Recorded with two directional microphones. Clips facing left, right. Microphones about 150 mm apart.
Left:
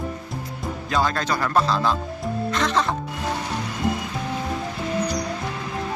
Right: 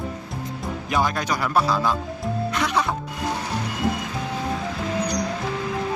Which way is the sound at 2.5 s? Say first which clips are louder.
Left 1 dB; 10° right (ahead or behind).